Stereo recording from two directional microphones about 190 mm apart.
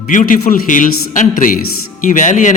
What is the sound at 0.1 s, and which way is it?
A man's voice, 45° left (ahead or behind).